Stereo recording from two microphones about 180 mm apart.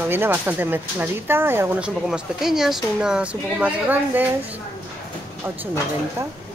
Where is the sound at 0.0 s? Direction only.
10° right (ahead or behind).